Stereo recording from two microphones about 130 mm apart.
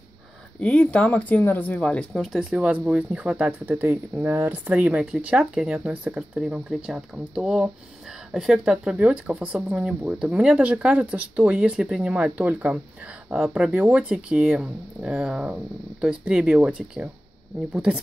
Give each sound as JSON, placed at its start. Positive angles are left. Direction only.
{"t": 0.6, "sound": "speech", "side_deg": 10}